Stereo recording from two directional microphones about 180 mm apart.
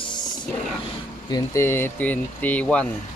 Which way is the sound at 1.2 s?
20° left (ahead or behind).